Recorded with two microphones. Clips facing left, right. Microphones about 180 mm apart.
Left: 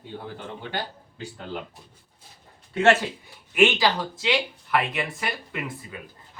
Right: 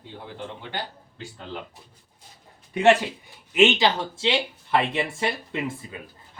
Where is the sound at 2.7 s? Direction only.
15° right (ahead or behind).